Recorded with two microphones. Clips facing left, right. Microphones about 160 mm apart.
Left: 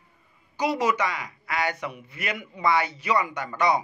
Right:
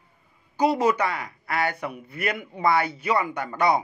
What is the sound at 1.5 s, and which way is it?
Speech, 55° right (ahead or behind).